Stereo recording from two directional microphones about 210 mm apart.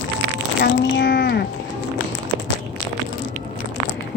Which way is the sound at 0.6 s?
55° left (ahead or behind).